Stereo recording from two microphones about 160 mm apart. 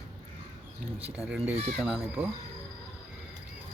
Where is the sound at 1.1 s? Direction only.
5° right (ahead or behind).